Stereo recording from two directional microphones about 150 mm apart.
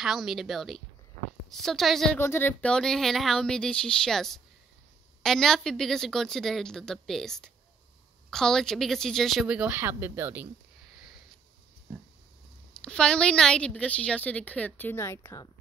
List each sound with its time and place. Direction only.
0.0 s speech: 5° right (ahead or behind)
2.1 s speech: 15° left (ahead or behind)
9.5 s speech: 10° right (ahead or behind)
12.8 s a woman's voice: 5° left (ahead or behind); by 15.5 s 20° left (ahead or behind)